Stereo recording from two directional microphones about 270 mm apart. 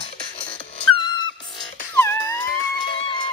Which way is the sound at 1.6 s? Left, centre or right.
Centre.